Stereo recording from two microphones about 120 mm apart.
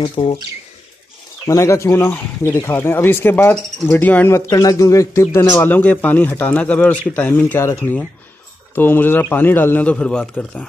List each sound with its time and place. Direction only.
0.0 s speech: 50° left (ahead or behind)
1.4 s speech: 25° left (ahead or behind)
4.5 s a man's voice: 30° left (ahead or behind); by 10.6 s 10° left (ahead or behind)